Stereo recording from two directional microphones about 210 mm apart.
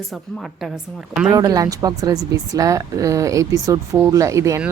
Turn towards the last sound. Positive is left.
turn(degrees=-15)  # may be behind; listen again after turning